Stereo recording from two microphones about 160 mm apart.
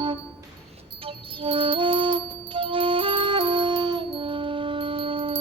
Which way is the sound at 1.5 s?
35° right (ahead or behind).